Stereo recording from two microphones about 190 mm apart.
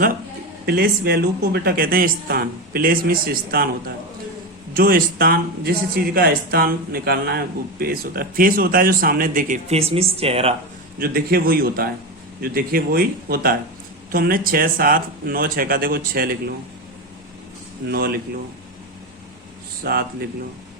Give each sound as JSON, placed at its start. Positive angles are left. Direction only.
{"t": 0.6, "sound": "speech", "side_deg": -55}
{"t": 11.0, "sound": "speech", "side_deg": -55}
{"t": 17.8, "sound": "speech", "side_deg": -55}
{"t": 19.8, "sound": "speech", "side_deg": -55}